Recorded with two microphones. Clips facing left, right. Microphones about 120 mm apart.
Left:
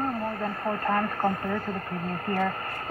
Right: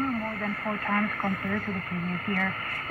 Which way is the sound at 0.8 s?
35° left (ahead or behind).